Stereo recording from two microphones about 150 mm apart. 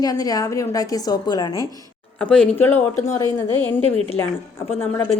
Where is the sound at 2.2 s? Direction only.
5° left (ahead or behind).